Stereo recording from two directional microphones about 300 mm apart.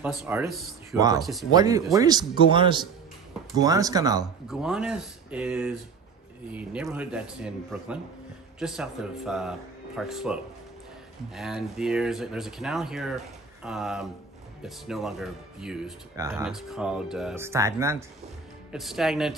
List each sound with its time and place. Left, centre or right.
0.0 s speech: centre
0.9 s speech: centre
1.2 s speech: centre
1.5 s speech: centre
4.4 s speech: centre